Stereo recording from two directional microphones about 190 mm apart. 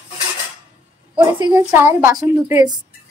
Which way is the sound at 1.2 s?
20° right (ahead or behind).